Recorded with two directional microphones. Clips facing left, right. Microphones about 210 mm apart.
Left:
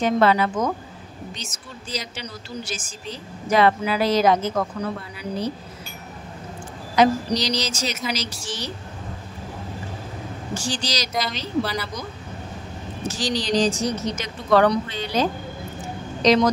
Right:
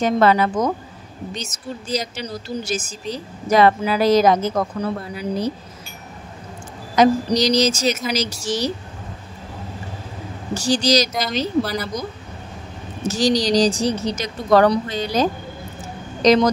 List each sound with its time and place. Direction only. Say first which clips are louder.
0.0 s a woman's voice: right 2 dB; 45° right (ahead or behind)
7.0 s a woman's voice: right 3 dB; 45° right (ahead or behind)
10.5 s a woman's voice: right 10 dB; 40° right (ahead or behind)
13.1 s speech: right 6 dB; 40° right (ahead or behind)
16.2 s a woman's voice: right 3 dB; 45° right (ahead or behind)